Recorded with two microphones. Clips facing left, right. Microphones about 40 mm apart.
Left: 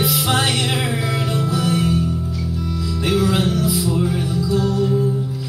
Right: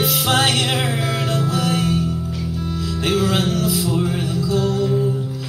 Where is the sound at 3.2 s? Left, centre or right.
Centre.